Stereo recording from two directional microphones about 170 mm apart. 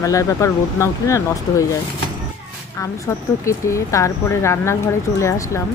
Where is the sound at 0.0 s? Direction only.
20° left (ahead or behind).